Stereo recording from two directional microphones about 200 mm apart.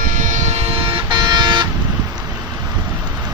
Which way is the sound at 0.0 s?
40° right (ahead or behind).